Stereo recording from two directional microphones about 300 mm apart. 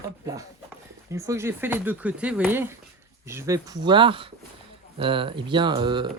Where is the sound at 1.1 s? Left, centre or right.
Centre.